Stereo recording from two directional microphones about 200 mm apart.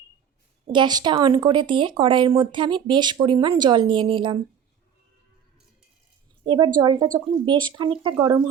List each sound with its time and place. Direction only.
0.7 s speech: 20° right (ahead or behind)
6.4 s a woman's voice: 25° right (ahead or behind)